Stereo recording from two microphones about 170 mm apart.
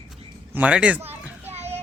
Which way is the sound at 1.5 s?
40° right (ahead or behind).